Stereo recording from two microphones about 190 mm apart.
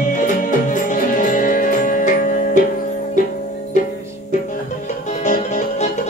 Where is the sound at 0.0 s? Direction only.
40° left (ahead or behind).